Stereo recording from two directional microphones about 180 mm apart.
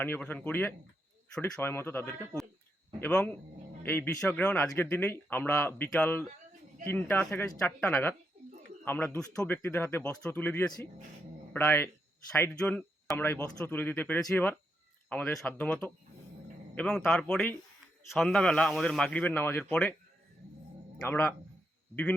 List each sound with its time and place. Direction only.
0.0 s speech: 10° left (ahead or behind)
21.0 s speech: 10° left (ahead or behind)